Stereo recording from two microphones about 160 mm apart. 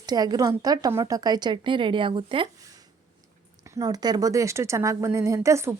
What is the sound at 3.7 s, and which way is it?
Speech, 20° right (ahead or behind).